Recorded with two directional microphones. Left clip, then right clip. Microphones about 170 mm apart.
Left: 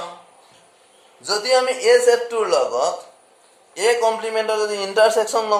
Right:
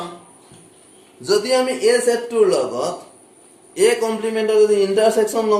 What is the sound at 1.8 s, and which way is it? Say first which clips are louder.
A man's voice: left 2 dB; 50° left (ahead or behind).